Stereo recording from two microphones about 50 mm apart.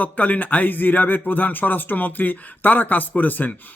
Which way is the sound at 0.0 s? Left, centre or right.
Left.